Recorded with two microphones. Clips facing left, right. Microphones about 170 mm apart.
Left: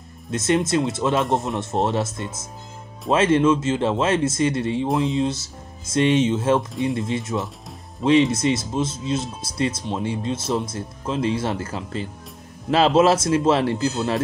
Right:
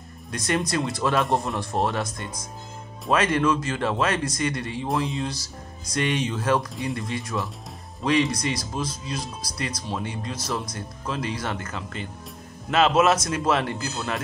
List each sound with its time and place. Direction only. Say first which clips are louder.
0.3 s speech: left 6 dB; 25° left (ahead or behind)